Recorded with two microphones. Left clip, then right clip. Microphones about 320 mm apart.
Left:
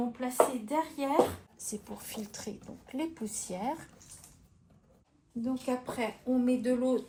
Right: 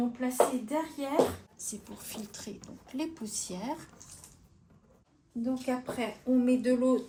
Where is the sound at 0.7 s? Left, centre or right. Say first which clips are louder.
Left 1 dB; centre.